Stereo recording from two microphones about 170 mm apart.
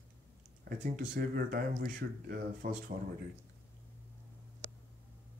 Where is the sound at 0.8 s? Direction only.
50° right (ahead or behind).